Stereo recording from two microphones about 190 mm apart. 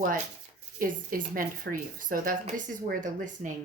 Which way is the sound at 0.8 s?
45° right (ahead or behind).